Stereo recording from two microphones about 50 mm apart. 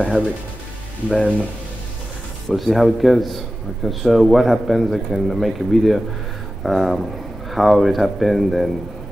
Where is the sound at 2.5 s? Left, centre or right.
Centre.